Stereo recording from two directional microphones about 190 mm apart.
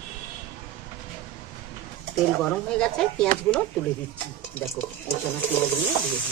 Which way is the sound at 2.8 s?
5° left (ahead or behind).